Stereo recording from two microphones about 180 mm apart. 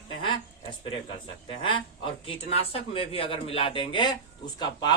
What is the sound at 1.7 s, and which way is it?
Speech, 30° left (ahead or behind).